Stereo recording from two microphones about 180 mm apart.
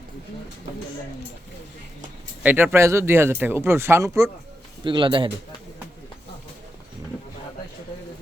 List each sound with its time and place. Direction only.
2.4 s speech: 10° right (ahead or behind)
4.8 s a man's voice: 25° right (ahead or behind)